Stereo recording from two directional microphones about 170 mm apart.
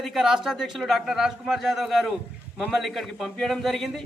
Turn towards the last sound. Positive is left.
turn(degrees=0)  # may be behind; listen again after turning